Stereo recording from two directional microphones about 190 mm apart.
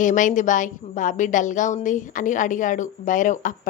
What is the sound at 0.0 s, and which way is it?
A woman's voice, 40° left (ahead or behind).